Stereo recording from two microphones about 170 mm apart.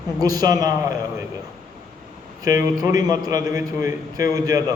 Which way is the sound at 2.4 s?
20° right (ahead or behind).